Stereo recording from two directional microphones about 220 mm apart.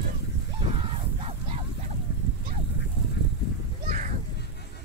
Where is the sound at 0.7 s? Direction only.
25° right (ahead or behind).